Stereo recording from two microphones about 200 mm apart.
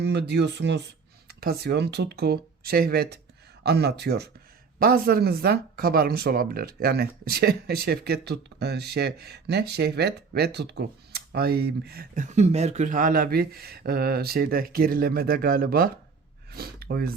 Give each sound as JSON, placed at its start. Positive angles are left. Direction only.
{"t": 0.0, "sound": "speech", "side_deg": -55}